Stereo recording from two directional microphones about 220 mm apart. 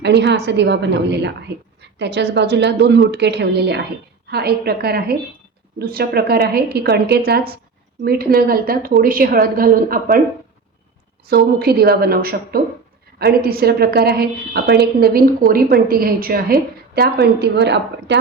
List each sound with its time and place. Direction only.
0.0 s a woman's voice: 50° right (ahead or behind)
11.3 s a woman's voice: 45° right (ahead or behind)